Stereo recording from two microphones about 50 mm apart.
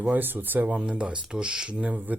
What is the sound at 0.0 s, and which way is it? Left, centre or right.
Speech, right.